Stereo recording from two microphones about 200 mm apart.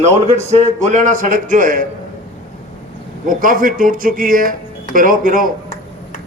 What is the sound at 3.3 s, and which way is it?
Speech, 45° right (ahead or behind).